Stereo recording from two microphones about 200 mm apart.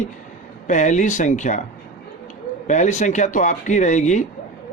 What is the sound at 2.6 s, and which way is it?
Speech, 35° left (ahead or behind).